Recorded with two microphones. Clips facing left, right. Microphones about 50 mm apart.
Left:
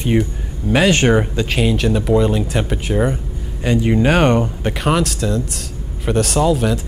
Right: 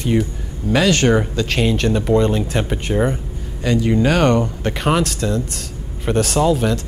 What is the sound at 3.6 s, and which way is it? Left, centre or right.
Speech, centre.